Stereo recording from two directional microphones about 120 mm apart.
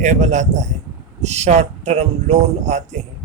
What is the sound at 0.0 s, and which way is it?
Speech, 80° right.